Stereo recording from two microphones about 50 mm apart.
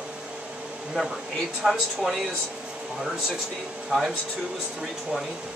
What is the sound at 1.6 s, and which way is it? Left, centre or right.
Speech, centre.